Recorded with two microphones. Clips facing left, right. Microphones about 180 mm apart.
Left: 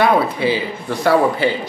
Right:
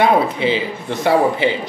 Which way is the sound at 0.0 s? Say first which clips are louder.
Even; 20° right (ahead or behind).